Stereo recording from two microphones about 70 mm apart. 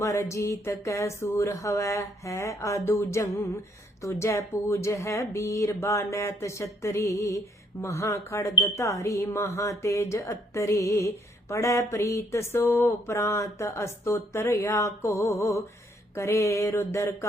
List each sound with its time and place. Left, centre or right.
0.0 s speech: left
16.1 s mantra: left